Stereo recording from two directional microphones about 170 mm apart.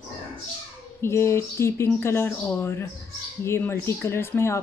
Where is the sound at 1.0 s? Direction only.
15° left (ahead or behind).